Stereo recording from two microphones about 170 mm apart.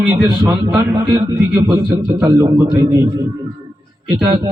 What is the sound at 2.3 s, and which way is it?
Speech, 20° right (ahead or behind).